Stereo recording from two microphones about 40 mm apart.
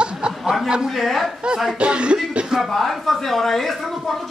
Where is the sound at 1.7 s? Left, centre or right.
Right.